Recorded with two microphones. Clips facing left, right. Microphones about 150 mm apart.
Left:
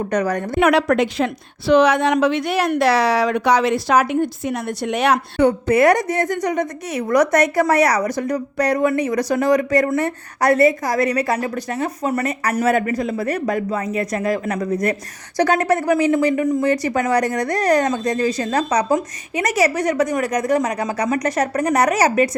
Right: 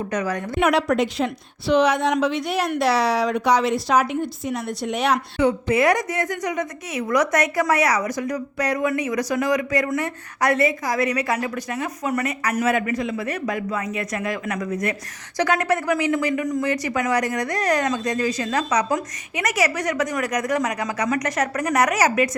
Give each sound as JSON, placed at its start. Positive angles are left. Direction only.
{"t": 0.6, "sound": "a woman's voice", "side_deg": 65}
{"t": 6.0, "sound": "speech", "side_deg": 35}